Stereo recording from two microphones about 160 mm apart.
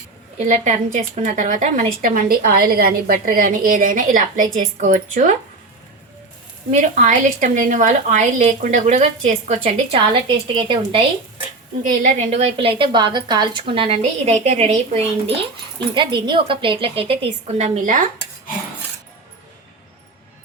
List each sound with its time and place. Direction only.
0.3 s a woman's voice: 50° right (ahead or behind)
6.7 s a woman's voice: 50° right (ahead or behind)
10.1 s a woman's voice: 30° right (ahead or behind)
11.8 s a woman's voice: 50° right (ahead or behind)
16.0 s a woman's voice: 30° right (ahead or behind); by 18.1 s 55° right (ahead or behind)